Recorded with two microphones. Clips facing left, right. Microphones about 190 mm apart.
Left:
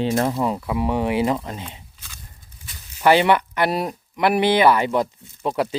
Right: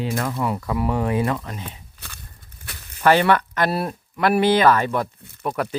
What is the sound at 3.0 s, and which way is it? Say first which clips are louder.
Speech: left 1 dB; 15° left (ahead or behind).